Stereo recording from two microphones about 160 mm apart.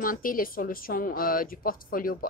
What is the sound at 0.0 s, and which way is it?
A woman's voice, 60° left (ahead or behind).